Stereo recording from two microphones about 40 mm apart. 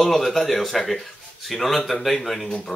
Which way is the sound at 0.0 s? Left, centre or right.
Centre.